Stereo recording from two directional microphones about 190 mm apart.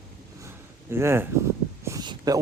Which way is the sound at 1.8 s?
15° right (ahead or behind).